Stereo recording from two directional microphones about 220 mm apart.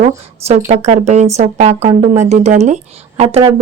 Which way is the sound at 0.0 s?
30° right (ahead or behind).